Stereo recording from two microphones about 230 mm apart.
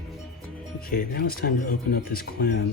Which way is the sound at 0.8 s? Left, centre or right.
Left.